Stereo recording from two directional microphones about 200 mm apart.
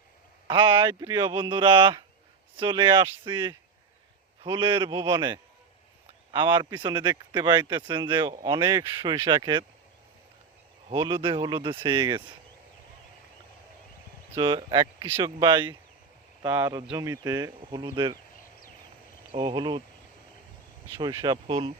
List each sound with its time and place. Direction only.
0.4 s speech: 25° right (ahead or behind)
10.9 s speech: 15° right (ahead or behind)
14.3 s speech: 25° right (ahead or behind)
19.3 s speech: 25° right (ahead or behind)
21.0 s speech: 20° right (ahead or behind)